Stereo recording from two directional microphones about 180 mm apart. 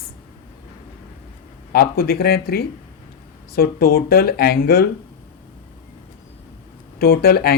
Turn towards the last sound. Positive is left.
turn(degrees=60)  # may be behind; listen again after turning